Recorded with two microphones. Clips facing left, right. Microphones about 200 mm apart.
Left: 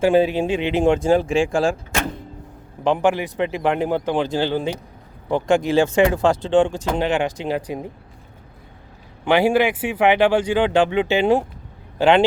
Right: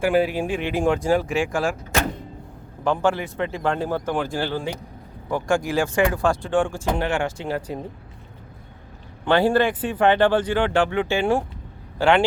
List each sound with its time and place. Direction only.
0.0 s speech: 25° left (ahead or behind)
2.8 s speech: 15° left (ahead or behind)
9.2 s speech: 10° left (ahead or behind)